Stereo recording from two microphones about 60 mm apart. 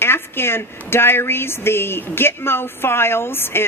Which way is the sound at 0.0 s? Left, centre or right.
Left.